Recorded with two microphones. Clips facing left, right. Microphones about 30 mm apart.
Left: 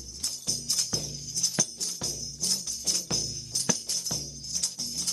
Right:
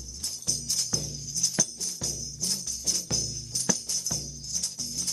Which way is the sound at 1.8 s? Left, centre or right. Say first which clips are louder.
Even; left.